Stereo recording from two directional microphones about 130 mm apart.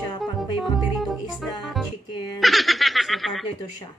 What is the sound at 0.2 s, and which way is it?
Music, centre (ahead or behind).